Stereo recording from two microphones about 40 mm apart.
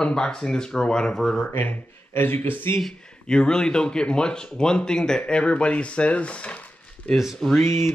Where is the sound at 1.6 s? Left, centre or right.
Left.